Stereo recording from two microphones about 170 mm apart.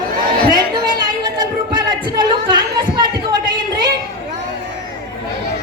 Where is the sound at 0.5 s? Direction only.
25° right (ahead or behind).